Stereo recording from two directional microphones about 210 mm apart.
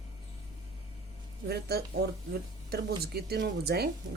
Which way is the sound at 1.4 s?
50° right (ahead or behind).